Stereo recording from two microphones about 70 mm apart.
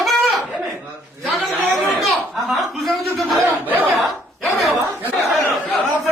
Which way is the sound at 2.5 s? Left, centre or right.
Centre.